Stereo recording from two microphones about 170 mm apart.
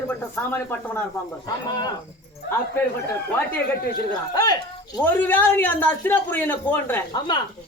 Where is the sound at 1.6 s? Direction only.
25° left (ahead or behind).